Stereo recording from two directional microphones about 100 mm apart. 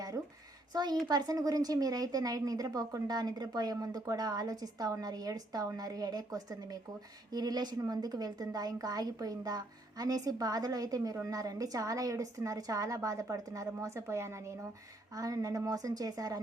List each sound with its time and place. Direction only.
0.7 s a child's voice: 45° right (ahead or behind)